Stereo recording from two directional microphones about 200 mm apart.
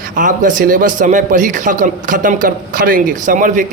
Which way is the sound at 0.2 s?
40° right (ahead or behind).